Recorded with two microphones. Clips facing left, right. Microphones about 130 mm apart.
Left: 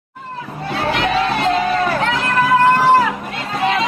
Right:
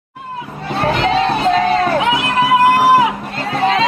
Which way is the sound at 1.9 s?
5° right (ahead or behind).